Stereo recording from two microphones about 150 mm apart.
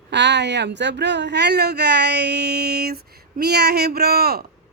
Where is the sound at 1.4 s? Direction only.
90° right.